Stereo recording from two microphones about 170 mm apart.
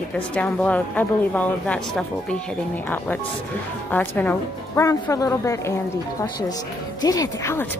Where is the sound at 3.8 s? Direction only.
10° left (ahead or behind).